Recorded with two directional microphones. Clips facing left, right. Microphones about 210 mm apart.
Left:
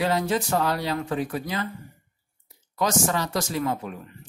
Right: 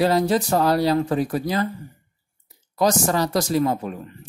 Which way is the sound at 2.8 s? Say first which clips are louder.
Right 5 dB; 35° right (ahead or behind).